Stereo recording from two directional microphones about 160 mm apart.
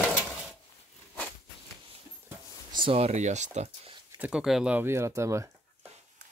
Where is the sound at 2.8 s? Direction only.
40° right (ahead or behind).